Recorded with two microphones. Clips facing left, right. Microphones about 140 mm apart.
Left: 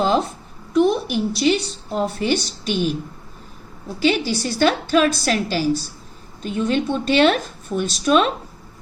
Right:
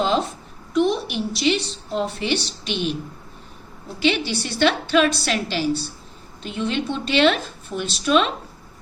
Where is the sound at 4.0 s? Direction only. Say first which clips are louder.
Left 2 dB; 40° left (ahead or behind).